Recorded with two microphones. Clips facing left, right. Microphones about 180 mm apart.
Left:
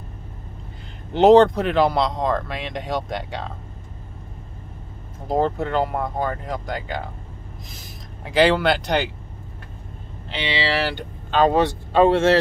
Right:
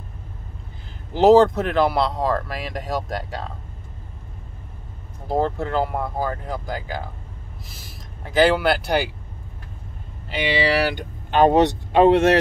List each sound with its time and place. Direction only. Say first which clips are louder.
1.1 s speech: left 1 dB; centre (ahead or behind)
5.3 s speech: left 1 dB; centre (ahead or behind)
8.2 s speech: even; centre (ahead or behind)
10.3 s speech: right 3 dB; 10° right (ahead or behind)